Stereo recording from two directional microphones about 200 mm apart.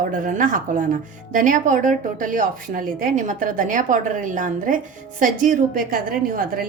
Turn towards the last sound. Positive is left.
turn(degrees=-45)  # may be behind; listen again after turning